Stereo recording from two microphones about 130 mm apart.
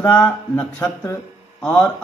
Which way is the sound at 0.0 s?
15° left (ahead or behind).